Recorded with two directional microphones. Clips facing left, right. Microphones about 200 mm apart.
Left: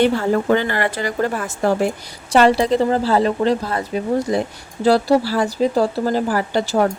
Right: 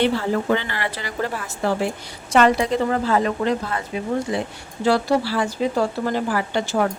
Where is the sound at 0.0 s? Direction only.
45° left (ahead or behind).